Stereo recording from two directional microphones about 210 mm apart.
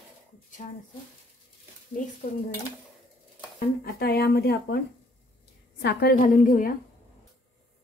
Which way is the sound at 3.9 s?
50° left (ahead or behind).